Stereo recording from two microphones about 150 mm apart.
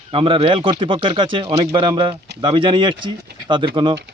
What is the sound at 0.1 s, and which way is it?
Speech, 40° right (ahead or behind).